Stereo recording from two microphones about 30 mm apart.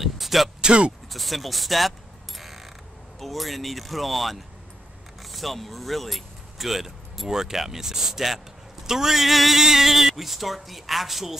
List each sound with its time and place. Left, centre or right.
0.0 s a sound: centre
0.6 s speech: right
1.1 s a sound: centre
3.2 s speech: centre
7.2 s speech: centre
9.6 s speech: centre